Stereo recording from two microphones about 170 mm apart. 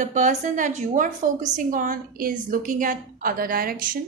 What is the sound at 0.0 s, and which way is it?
A woman's voice, 45° right (ahead or behind).